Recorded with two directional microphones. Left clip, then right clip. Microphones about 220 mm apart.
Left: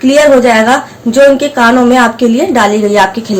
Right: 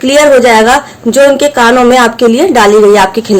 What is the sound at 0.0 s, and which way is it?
A woman's voice, 50° right (ahead or behind).